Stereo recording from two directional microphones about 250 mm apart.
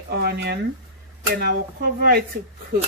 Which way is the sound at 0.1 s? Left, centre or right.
Right.